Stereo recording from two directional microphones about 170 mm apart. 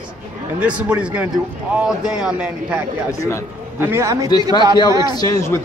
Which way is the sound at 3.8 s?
15° right (ahead or behind).